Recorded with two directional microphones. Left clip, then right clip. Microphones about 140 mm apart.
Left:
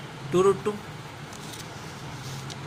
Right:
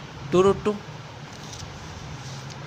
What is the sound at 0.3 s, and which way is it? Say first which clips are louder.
Speech: right 2 dB; 90° right.